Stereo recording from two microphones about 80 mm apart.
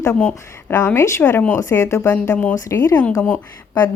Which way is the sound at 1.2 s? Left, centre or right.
Left.